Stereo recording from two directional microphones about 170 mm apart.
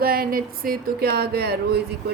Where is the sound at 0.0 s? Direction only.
60° right (ahead or behind).